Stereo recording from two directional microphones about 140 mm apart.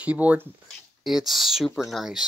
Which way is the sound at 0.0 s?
10° right (ahead or behind).